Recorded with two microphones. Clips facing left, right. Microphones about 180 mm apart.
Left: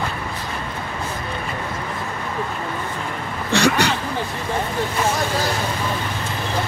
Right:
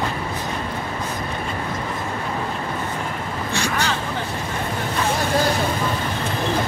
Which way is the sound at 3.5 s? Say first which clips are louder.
Left 7 dB; 75° left (ahead or behind).